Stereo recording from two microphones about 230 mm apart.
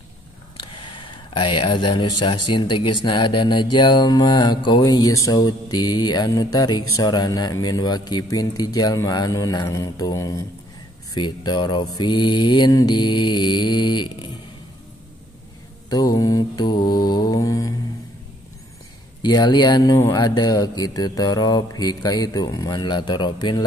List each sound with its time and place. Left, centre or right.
0.9 s speech: left
2.5 s mantra: centre
3.7 s speech: centre
11.1 s mantra: centre
15.9 s mantra: centre
19.2 s speech: centre